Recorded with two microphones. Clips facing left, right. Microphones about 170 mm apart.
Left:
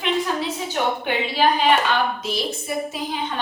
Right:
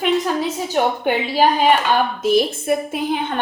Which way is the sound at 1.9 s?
50° right (ahead or behind).